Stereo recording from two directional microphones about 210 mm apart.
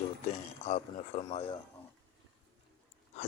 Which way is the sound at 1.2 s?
30° left (ahead or behind).